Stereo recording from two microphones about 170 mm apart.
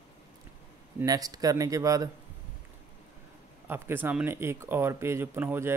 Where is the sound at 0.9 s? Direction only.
20° right (ahead or behind).